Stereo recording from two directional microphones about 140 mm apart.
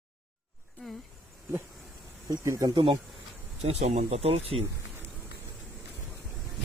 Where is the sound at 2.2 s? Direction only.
20° right (ahead or behind).